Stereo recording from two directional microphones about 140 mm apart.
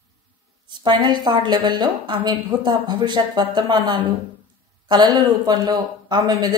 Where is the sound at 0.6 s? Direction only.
35° right (ahead or behind).